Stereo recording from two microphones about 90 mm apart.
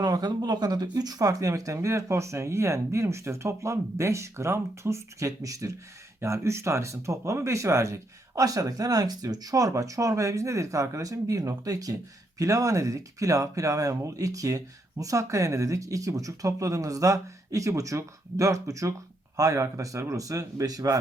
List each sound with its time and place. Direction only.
0.0 s speech: 45° right (ahead or behind)